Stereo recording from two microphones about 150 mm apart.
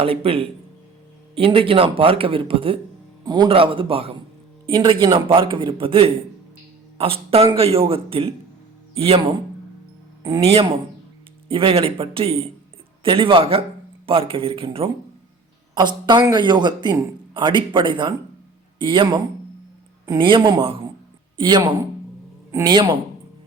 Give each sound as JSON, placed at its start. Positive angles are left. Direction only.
{"t": 0.0, "sound": "a man's voice", "side_deg": -40}
{"t": 10.2, "sound": "a man's voice", "side_deg": -35}